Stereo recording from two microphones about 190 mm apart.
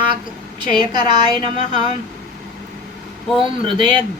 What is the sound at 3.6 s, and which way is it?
Speech, 25° right (ahead or behind).